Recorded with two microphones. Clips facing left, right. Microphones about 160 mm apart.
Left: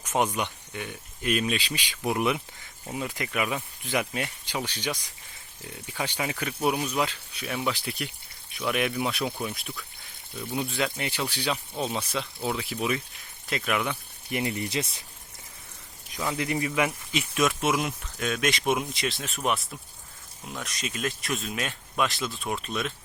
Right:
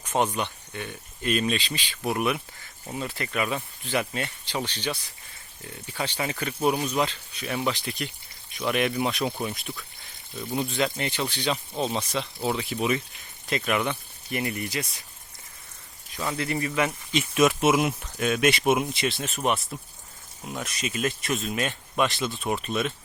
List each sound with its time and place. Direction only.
0.1 s speech: 10° left (ahead or behind)
6.0 s speech: 10° left (ahead or behind)
14.3 s speech: 20° left (ahead or behind)
16.1 s speech: 10° left (ahead or behind)
17.4 s speech: 5° right (ahead or behind)